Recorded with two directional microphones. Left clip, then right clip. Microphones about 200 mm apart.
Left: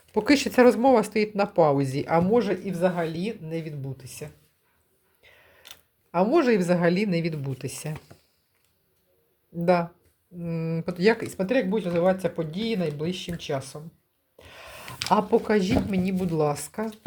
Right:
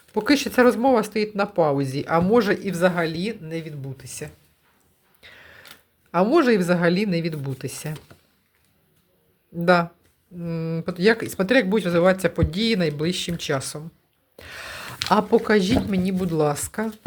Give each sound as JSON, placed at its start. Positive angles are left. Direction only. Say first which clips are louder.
{"t": 0.1, "sound": "speech", "louder": "right 1 dB", "side_deg": 5}
{"t": 2.3, "sound": "speech", "louder": "right 4 dB", "side_deg": -20}
{"t": 5.2, "sound": "a sound", "louder": "right 9 dB", "side_deg": -20}
{"t": 6.1, "sound": "speech", "louder": "right 3 dB", "side_deg": -10}
{"t": 9.6, "sound": "speech", "louder": "right 4 dB", "side_deg": -10}